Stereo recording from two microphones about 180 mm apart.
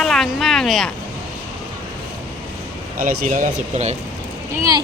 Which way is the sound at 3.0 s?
50° right (ahead or behind).